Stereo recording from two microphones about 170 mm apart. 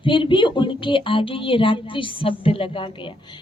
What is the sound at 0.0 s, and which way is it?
A woman's voice, 30° left (ahead or behind).